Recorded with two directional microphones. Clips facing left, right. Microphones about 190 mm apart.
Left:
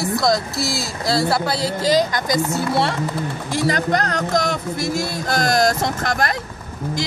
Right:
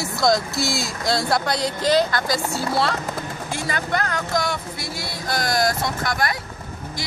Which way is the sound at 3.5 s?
35° left (ahead or behind).